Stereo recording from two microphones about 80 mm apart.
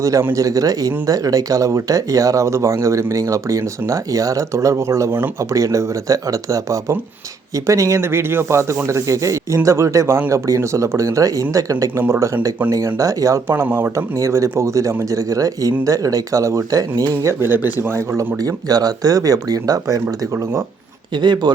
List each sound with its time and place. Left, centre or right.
0.0 s speech: right
11.9 s speech: right
13.0 s speech: right
13.5 s speech: right
13.9 s speech: right
17.2 s speech: right
18.3 s speech: right
21.1 s speech: right